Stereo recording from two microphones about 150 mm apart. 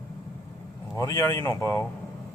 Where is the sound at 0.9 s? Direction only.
20° left (ahead or behind).